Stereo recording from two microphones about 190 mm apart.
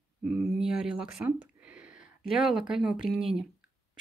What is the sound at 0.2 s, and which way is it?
Speech, 5° right (ahead or behind).